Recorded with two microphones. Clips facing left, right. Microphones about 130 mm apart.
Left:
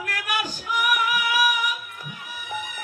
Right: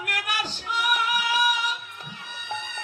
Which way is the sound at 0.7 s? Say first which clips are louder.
Left 2 dB; 25° right (ahead or behind).